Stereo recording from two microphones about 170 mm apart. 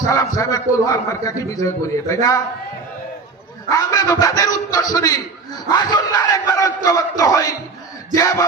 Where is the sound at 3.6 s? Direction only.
20° left (ahead or behind).